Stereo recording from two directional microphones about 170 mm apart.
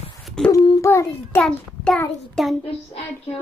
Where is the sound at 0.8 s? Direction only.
15° left (ahead or behind).